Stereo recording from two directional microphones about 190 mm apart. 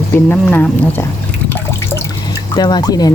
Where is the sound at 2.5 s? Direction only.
20° left (ahead or behind).